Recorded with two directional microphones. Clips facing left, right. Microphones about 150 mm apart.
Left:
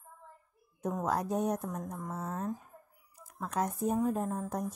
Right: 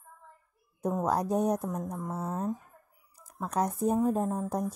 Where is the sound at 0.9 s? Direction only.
35° right (ahead or behind).